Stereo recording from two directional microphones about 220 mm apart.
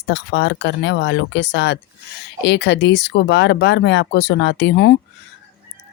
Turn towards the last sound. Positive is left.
turn(degrees=50)  # may be behind; listen again after turning